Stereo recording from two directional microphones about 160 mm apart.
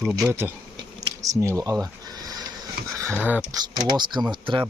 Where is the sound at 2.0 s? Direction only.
25° right (ahead or behind).